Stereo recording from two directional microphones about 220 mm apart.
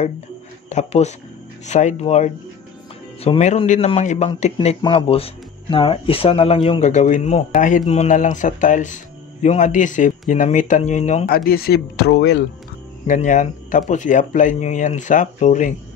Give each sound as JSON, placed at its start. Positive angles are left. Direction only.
{"t": 0.7, "sound": "speech", "side_deg": 30}
{"t": 13.0, "sound": "speech", "side_deg": 35}